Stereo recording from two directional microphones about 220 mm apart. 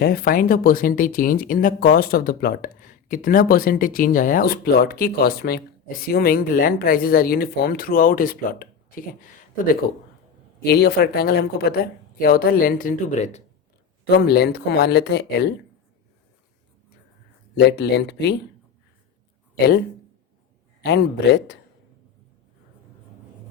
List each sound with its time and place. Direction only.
0.0 s speech: 45° left (ahead or behind)
10.6 s speech: 45° left (ahead or behind); by 13.4 s 30° left (ahead or behind)
14.2 s speech: 45° left (ahead or behind)
17.6 s speech: 50° left (ahead or behind)
19.5 s speech: 50° left (ahead or behind)
20.8 s speech: 50° left (ahead or behind)